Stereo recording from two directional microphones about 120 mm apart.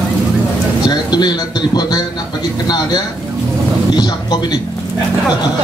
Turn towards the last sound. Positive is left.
turn(degrees=35)  # may be behind; listen again after turning